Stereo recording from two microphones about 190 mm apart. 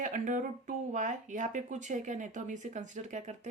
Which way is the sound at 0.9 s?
40° right (ahead or behind).